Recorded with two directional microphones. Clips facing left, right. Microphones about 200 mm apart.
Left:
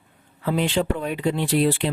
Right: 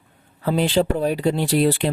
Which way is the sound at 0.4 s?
35° right (ahead or behind).